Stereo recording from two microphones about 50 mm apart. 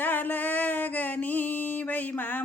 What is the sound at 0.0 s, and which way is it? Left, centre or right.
Music, left.